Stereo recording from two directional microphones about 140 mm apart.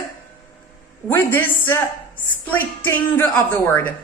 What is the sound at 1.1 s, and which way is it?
A woman's voice, 15° left (ahead or behind).